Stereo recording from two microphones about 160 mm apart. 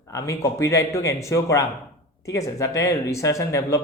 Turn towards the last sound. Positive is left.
turn(degrees=20)  # may be behind; listen again after turning